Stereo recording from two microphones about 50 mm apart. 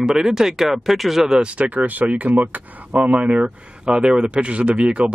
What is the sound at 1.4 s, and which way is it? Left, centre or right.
Speech, right.